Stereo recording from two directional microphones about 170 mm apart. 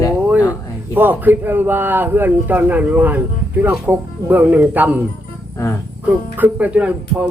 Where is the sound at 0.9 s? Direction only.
10° right (ahead or behind).